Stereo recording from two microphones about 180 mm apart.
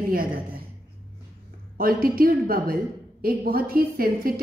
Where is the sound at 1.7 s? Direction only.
55° right (ahead or behind).